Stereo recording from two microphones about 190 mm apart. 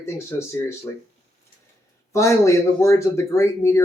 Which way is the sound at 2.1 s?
15° left (ahead or behind).